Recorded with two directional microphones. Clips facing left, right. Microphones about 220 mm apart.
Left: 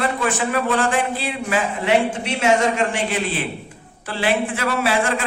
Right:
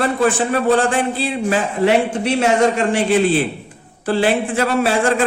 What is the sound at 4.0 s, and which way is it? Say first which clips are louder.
Speech: right 5 dB; 35° right (ahead or behind).